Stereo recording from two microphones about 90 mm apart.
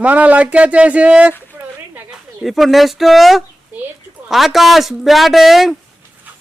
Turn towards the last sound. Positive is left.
turn(degrees=0)  # may be behind; listen again after turning